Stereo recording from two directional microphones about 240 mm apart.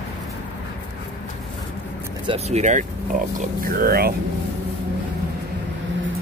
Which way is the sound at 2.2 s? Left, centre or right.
Right.